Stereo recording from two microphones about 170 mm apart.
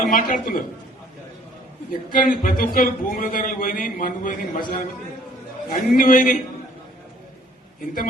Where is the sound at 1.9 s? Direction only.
55° left (ahead or behind).